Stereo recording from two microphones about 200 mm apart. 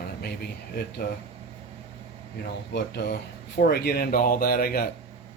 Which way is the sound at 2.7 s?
60° left (ahead or behind).